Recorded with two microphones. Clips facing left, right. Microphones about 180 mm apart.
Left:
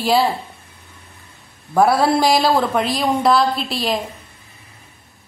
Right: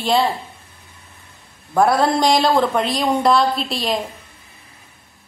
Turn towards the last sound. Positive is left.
turn(degrees=0)  # may be behind; listen again after turning